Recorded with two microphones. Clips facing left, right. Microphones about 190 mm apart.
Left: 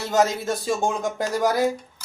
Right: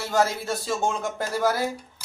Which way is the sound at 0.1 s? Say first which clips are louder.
Left 3 dB; 20° left (ahead or behind).